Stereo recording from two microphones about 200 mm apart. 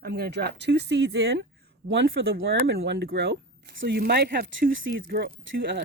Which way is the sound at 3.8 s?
50° right (ahead or behind).